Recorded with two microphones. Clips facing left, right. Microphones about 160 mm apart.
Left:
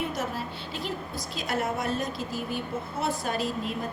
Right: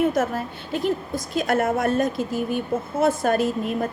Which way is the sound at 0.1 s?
50° right (ahead or behind).